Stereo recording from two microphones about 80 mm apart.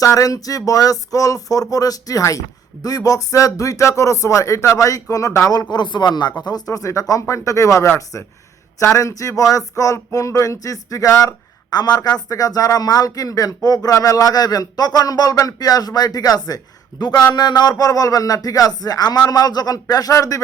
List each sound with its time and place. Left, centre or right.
0.0 s speech: left
5.7 s speech: left
11.7 s speech: left
17.0 s speech: left